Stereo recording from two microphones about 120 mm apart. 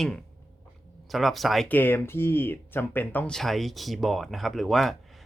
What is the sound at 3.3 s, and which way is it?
Speech, centre (ahead or behind).